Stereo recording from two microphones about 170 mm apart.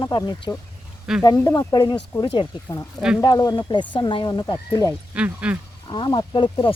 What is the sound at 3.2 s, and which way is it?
Speech, 20° left (ahead or behind).